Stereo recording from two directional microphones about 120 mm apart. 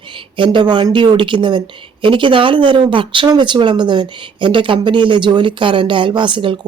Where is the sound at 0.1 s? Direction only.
45° right (ahead or behind).